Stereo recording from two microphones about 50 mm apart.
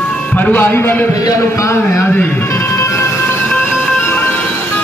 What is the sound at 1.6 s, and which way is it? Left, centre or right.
Speech, left.